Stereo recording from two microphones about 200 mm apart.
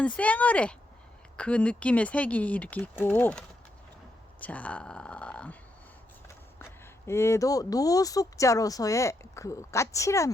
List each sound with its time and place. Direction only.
0.0 s speech: 5° left (ahead or behind)